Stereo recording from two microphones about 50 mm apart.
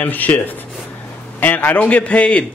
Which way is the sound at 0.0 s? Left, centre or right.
Left.